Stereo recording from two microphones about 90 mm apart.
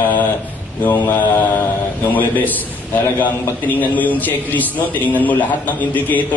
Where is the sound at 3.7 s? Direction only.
20° left (ahead or behind).